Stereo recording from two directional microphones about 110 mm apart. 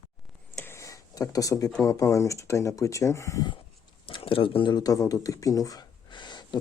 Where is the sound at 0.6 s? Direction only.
25° left (ahead or behind).